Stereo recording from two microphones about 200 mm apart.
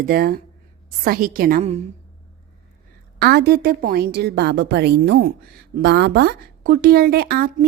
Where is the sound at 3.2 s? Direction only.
55° right (ahead or behind).